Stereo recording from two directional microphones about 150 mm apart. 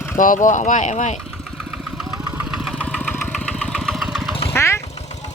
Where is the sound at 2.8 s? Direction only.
10° left (ahead or behind).